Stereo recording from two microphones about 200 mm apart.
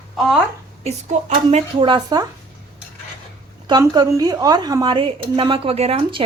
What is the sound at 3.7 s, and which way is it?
Speech, 20° right (ahead or behind).